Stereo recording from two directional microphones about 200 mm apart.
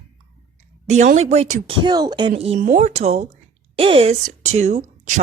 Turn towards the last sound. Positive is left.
turn(degrees=-35)  # may be behind; listen again after turning